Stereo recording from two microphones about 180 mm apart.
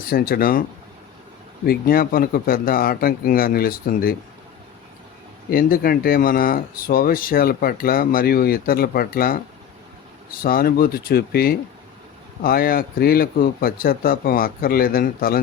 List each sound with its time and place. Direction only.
0.1 s a man's voice: 55° left (ahead or behind)
1.6 s speech: 55° left (ahead or behind)
5.5 s speech: 55° left (ahead or behind)
10.4 s a man's voice: 55° left (ahead or behind)